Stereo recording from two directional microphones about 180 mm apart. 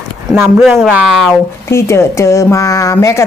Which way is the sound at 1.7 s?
15° left (ahead or behind).